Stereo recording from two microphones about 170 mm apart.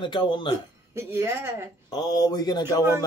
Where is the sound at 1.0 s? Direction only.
15° right (ahead or behind).